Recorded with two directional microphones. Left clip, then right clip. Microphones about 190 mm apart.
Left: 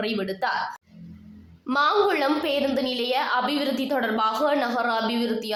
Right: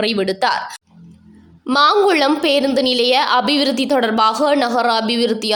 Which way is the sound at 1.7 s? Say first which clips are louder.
Right 8 dB; 45° right (ahead or behind).